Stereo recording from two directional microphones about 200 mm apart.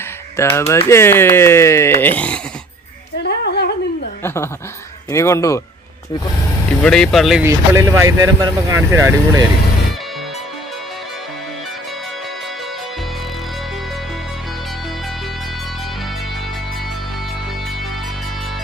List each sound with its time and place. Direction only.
0.3 s speech: 15° left (ahead or behind)
3.2 s a sound: 50° left (ahead or behind)
5.1 s speech: 15° left (ahead or behind)
6.8 s speech: 5° left (ahead or behind)
7.4 s speech: 15° right (ahead or behind)